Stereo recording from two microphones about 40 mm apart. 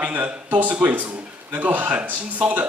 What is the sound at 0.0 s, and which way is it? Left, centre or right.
A man's voice, right.